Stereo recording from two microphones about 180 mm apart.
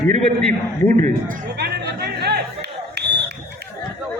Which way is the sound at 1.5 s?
65° right (ahead or behind).